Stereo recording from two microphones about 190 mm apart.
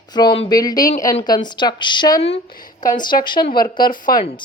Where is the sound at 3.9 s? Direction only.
45° left (ahead or behind).